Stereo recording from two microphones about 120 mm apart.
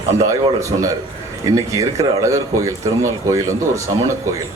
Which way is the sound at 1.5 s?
30° right (ahead or behind).